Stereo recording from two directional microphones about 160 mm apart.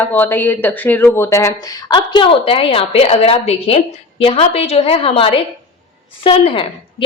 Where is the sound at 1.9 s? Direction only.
30° left (ahead or behind).